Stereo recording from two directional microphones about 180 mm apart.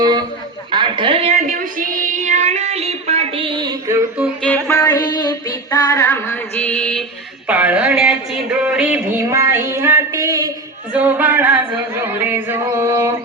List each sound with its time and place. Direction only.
0.0 s a sound: 20° right (ahead or behind)
0.7 s music: 25° right (ahead or behind)
4.4 s music: 10° left (ahead or behind)
4.8 s music: 20° left (ahead or behind)
7.4 s a sound: 10° right (ahead or behind)
10.9 s music: 10° right (ahead or behind)
12.0 s chant: 10° right (ahead or behind)